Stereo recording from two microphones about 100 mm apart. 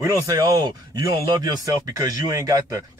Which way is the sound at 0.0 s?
35° right (ahead or behind).